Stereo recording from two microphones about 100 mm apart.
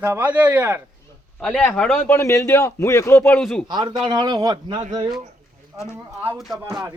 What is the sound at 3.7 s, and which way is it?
A man's voice, 45° right (ahead or behind).